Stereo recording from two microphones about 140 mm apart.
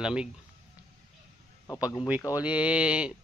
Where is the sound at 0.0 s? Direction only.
5° right (ahead or behind).